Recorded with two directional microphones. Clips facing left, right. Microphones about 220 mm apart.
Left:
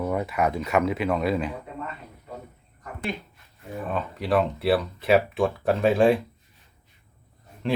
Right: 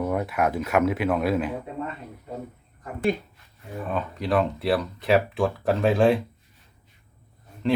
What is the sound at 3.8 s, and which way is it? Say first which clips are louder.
Speech: even; centre (ahead or behind).